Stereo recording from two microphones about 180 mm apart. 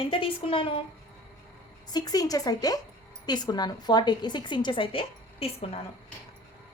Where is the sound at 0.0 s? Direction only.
30° left (ahead or behind).